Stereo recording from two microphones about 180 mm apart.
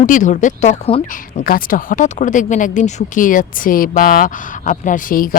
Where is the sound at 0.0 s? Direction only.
45° left (ahead or behind).